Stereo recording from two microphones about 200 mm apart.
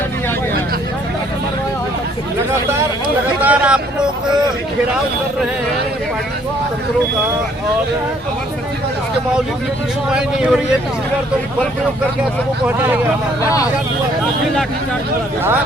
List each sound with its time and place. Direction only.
3.4 s a sound: 5° right (ahead or behind)
10.1 s speech: 5° right (ahead or behind)
12.6 s speech: 10° right (ahead or behind)
13.4 s speech: 15° left (ahead or behind)